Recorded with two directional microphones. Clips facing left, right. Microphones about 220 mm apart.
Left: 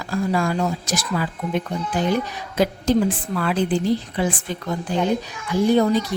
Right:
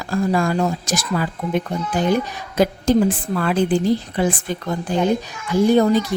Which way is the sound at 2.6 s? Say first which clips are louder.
Right 3 dB; 45° right (ahead or behind).